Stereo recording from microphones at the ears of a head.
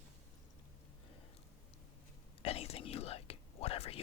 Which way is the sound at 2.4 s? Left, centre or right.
Left.